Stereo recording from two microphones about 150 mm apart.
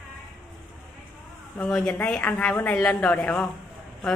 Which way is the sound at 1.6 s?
5° left (ahead or behind).